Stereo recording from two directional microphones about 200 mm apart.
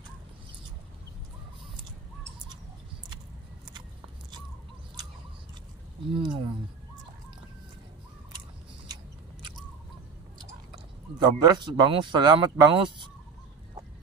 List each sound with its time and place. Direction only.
6.1 s speech: 25° right (ahead or behind)
10.7 s speech: 20° right (ahead or behind)